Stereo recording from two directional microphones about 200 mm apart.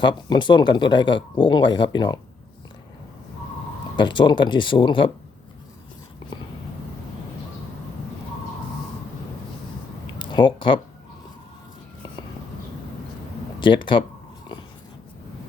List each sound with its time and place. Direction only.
0.0 s speech: 25° left (ahead or behind)
3.9 s speech: 25° left (ahead or behind)
10.2 s speech: 25° left (ahead or behind)
13.6 s speech: 25° left (ahead or behind)